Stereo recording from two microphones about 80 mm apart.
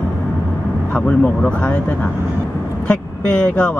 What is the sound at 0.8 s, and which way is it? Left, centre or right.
Speech, centre.